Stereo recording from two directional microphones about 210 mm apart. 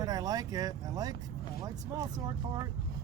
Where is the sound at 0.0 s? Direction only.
20° right (ahead or behind).